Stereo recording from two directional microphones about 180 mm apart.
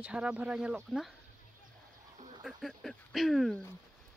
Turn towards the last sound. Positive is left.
turn(degrees=0)  # may be behind; listen again after turning